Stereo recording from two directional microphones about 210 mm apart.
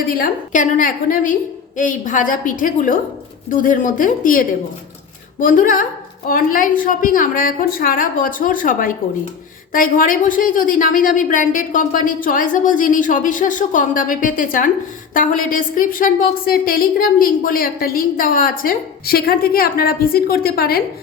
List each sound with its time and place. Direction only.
0.2 s a woman's voice: 40° left (ahead or behind)